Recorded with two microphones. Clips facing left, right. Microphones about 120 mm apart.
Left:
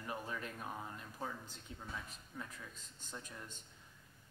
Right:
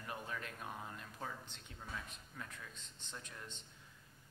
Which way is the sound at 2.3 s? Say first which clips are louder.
Left 3 dB; 15° left (ahead or behind).